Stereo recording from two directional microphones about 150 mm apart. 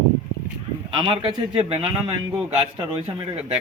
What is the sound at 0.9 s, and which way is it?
Speech, 30° right (ahead or behind).